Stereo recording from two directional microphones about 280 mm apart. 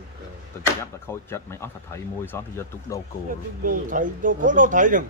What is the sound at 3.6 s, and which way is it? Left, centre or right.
Speech, right.